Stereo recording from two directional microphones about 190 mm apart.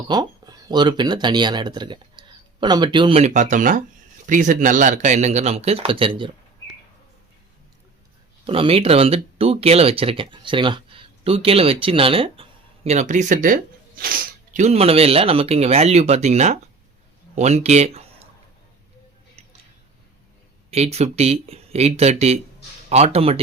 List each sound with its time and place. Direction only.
0.1 s speech: 20° right (ahead or behind)
8.4 s speech: 30° right (ahead or behind)
20.7 s speech: 35° right (ahead or behind)